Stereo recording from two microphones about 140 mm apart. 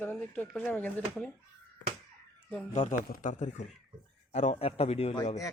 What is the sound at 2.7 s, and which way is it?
A man's voice, 65° left (ahead or behind).